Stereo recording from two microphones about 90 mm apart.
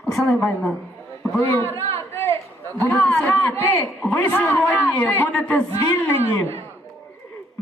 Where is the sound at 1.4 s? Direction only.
25° left (ahead or behind).